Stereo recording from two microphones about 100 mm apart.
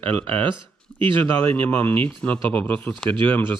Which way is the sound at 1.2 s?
20° left (ahead or behind).